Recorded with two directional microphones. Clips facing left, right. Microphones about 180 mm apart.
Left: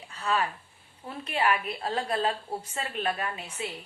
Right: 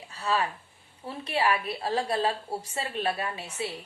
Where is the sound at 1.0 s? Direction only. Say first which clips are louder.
Right 1 dB; 35° right (ahead or behind).